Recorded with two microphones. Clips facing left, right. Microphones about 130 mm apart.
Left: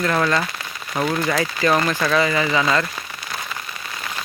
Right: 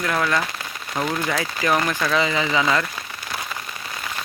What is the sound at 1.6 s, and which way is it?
Speech, 15° right (ahead or behind).